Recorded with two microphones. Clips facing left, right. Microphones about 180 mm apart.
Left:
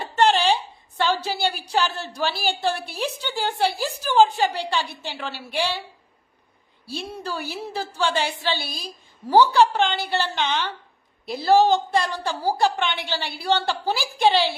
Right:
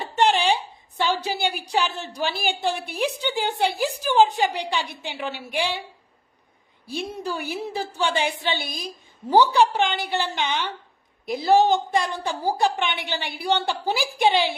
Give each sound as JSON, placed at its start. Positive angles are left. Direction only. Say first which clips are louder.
{"t": 0.2, "sound": "a woman's voice", "louder": "left 1 dB", "side_deg": -15}
{"t": 6.8, "sound": "a woman's voice", "louder": "right 2 dB", "side_deg": -15}